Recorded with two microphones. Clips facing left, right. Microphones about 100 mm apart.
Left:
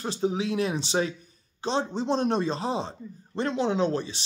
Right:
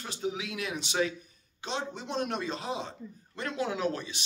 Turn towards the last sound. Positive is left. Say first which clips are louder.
# left 6 dB
turn(degrees=30)  # may be behind; listen again after turning